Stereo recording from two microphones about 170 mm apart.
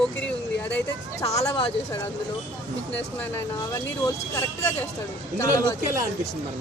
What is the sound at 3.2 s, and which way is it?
Speech, 10° left (ahead or behind).